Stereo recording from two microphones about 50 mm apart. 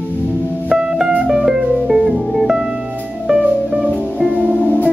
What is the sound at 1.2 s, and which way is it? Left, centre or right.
Music, centre.